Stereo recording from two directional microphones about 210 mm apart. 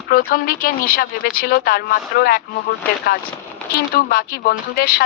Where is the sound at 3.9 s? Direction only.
45° left (ahead or behind).